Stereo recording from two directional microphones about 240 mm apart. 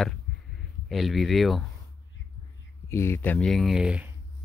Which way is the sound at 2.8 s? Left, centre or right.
Centre.